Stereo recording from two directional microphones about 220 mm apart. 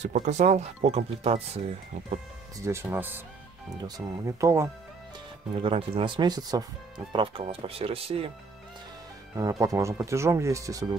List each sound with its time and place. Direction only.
0.0 s speech: 35° right (ahead or behind)
2.6 s speech: 10° right (ahead or behind)
5.6 s speech: 25° right (ahead or behind)
9.4 s speech: 15° right (ahead or behind)